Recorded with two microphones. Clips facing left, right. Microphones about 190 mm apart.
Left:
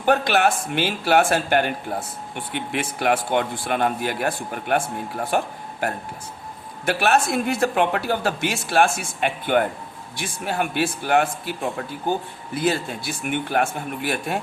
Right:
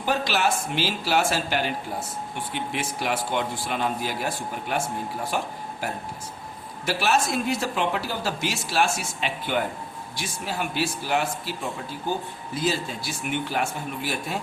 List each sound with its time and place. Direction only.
0.0 s speech: 60° left (ahead or behind)
6.8 s speech: 60° left (ahead or behind)
12.5 s speech: 60° left (ahead or behind)